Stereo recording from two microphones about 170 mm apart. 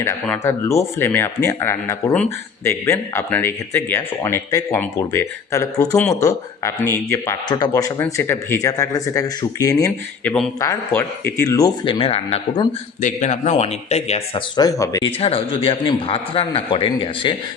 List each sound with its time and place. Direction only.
0.3 s speech: 15° left (ahead or behind)
10.2 s speech: 5° left (ahead or behind)
10.6 s speech: 15° left (ahead or behind)
11.9 s a man's voice: 35° left (ahead or behind)
14.5 s speech: 20° left (ahead or behind)
15.2 s a man's voice: 35° left (ahead or behind)